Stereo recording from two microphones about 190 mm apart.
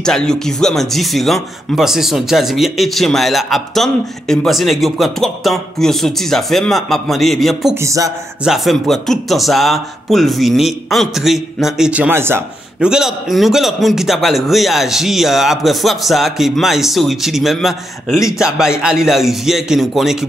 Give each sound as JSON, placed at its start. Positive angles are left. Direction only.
{"t": 0.0, "sound": "speech", "side_deg": 5}
{"t": 7.7, "sound": "speech", "side_deg": -15}
{"t": 8.5, "sound": "speech", "side_deg": 0}